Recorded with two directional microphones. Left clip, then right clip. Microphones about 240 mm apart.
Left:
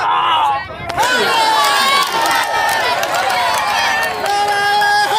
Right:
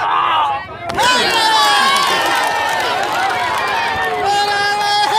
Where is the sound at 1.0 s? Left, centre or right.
Right.